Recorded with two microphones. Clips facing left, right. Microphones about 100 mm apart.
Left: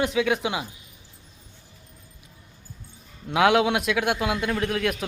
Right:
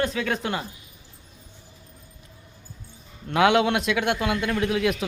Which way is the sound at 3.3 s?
Centre (ahead or behind).